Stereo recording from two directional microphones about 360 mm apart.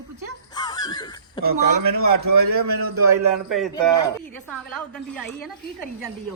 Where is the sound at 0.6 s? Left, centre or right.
Centre.